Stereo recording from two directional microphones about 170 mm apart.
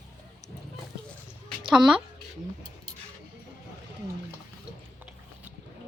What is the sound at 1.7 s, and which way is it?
Speech, centre (ahead or behind).